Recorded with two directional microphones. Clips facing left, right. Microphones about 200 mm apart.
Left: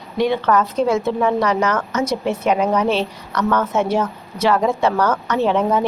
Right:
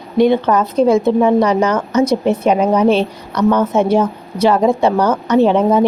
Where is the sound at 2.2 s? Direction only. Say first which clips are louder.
Right 5 dB; 30° right (ahead or behind).